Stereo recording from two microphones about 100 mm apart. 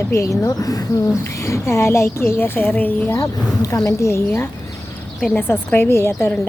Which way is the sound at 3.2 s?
35° left (ahead or behind).